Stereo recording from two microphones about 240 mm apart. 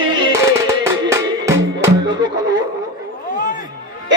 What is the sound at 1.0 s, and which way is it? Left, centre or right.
Music, centre.